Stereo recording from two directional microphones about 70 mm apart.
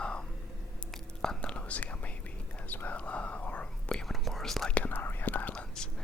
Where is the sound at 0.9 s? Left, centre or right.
Centre.